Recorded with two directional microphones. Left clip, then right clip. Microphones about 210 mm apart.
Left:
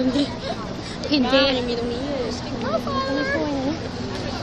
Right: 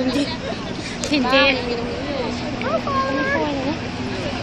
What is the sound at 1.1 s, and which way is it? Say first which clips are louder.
Speech: right 2 dB; 45° left (ahead or behind).